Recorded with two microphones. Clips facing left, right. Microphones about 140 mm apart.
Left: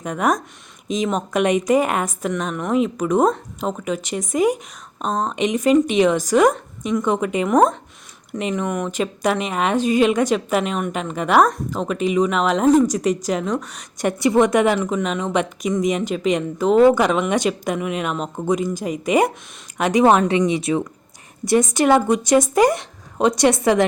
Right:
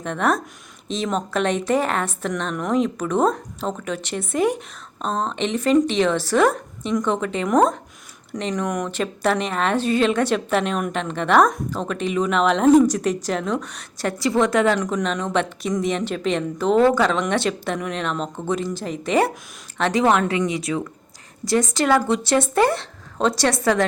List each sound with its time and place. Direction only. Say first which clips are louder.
0.0 s a woman's voice: left 1 dB; 10° left (ahead or behind)